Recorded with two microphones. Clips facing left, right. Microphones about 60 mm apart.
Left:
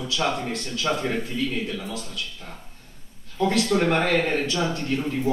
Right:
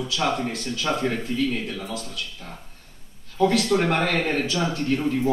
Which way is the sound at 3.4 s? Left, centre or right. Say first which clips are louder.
Right 1 dB; centre.